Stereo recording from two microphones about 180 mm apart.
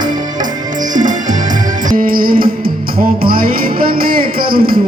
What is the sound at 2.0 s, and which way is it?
Music, 55° right (ahead or behind).